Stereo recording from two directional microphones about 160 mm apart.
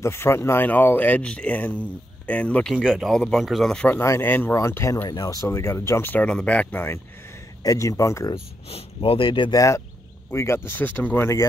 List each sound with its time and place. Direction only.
0.0 s speech: 15° left (ahead or behind)
8.6 s speech: 35° left (ahead or behind); by 11.4 s 15° left (ahead or behind)